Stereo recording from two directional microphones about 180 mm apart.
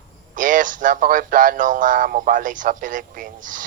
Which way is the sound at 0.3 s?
45° right (ahead or behind).